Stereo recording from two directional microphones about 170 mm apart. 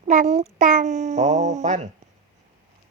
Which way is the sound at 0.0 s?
45° right (ahead or behind).